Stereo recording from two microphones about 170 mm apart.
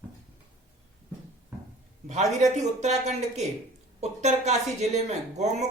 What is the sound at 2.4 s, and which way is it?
A woman's voice, 45° right (ahead or behind).